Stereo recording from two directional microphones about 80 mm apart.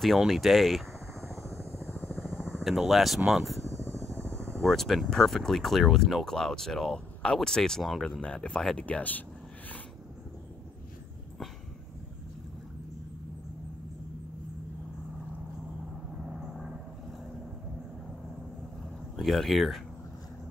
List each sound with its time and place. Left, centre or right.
0.0 s speech: centre
1.2 s vehicle: right
1.9 s helicopter: left
2.3 s vehicle: centre
3.3 s speech: centre
3.6 s a sound: right
4.6 s speech: centre
8.8 s speech: centre
19.1 s speech: centre